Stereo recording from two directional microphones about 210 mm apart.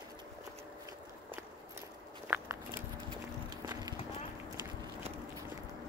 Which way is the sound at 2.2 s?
10° right (ahead or behind).